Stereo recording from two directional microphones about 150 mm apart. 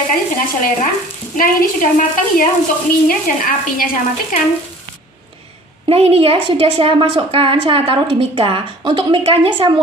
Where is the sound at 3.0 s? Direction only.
70° left (ahead or behind).